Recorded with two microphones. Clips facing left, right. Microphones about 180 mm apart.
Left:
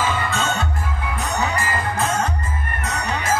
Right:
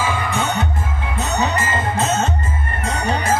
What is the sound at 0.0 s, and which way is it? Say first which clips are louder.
Music: right 1 dB; 15° right (ahead or behind).